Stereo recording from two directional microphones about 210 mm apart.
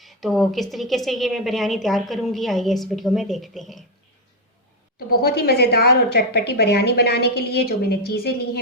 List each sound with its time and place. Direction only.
0.0 s a woman's voice: centre (ahead or behind)
4.9 s a woman's voice: 45° left (ahead or behind)